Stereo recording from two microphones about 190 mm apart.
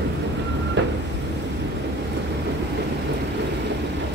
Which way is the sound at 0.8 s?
70° right (ahead or behind).